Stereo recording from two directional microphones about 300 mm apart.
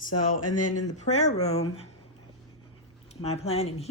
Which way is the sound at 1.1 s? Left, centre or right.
Left.